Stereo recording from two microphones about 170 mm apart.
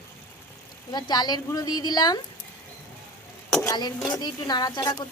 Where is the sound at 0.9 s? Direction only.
25° left (ahead or behind).